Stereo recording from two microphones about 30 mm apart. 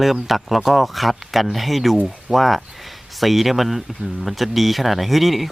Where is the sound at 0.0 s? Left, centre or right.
Centre.